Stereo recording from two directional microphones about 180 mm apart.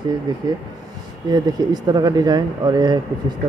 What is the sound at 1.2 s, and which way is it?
Speech, 20° right (ahead or behind).